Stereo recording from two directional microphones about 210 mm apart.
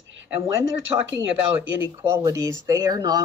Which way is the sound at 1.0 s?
10° right (ahead or behind).